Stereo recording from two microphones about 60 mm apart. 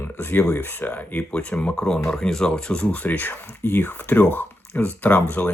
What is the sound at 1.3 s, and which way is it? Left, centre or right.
Speech, centre.